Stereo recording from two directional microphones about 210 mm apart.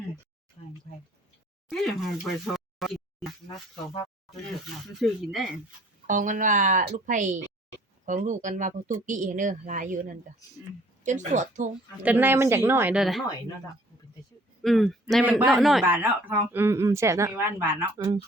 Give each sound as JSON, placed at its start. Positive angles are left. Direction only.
{"t": 1.7, "sound": "speech", "side_deg": 0}
{"t": 4.9, "sound": "a man's voice", "side_deg": 0}
{"t": 6.1, "sound": "speech", "side_deg": -40}
{"t": 12.0, "sound": "speech", "side_deg": -10}
{"t": 14.6, "sound": "a man's voice", "side_deg": 0}